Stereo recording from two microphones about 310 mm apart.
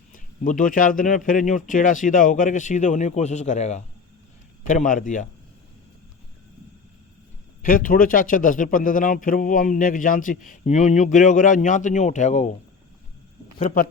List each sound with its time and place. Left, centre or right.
0.1 s a man's voice: left
7.6 s a man's voice: left
13.6 s a man's voice: left